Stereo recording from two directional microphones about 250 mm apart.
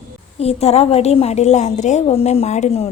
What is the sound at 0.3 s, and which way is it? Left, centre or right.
A woman's voice, left.